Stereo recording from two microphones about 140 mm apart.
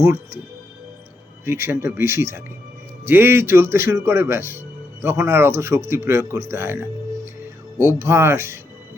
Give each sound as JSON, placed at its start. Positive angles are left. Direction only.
{"t": 1.5, "sound": "speech", "side_deg": -15}
{"t": 7.9, "sound": "speech", "side_deg": -20}